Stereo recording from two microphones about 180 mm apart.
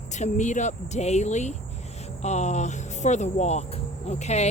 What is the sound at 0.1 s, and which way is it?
Speech, 40° left (ahead or behind).